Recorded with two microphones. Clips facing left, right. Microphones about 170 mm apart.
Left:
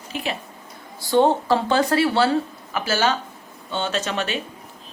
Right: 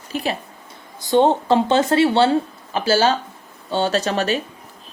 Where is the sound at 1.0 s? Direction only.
20° right (ahead or behind).